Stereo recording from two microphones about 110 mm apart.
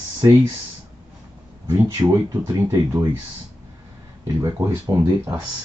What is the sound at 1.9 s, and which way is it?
Speech, 35° right (ahead or behind).